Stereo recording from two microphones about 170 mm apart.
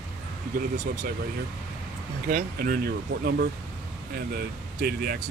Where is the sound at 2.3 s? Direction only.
60° right (ahead or behind).